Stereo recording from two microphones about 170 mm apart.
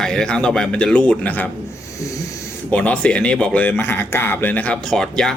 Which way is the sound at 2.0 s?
20° left (ahead or behind).